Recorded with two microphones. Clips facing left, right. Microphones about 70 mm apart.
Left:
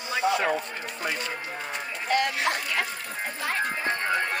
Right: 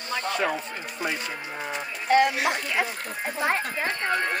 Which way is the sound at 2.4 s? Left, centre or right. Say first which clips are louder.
Right 2 dB; centre.